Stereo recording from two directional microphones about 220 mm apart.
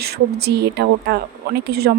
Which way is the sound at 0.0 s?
50° right (ahead or behind).